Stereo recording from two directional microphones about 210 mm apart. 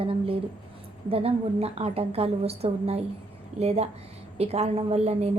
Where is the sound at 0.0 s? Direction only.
25° right (ahead or behind).